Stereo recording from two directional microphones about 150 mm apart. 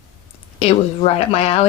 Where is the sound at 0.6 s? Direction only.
40° left (ahead or behind).